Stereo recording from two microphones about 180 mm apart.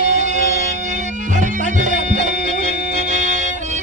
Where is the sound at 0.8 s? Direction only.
40° right (ahead or behind).